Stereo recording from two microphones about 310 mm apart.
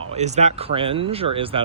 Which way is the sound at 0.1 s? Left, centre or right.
Right.